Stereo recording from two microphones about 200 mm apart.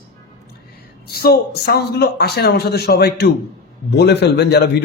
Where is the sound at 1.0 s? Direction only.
50° left (ahead or behind).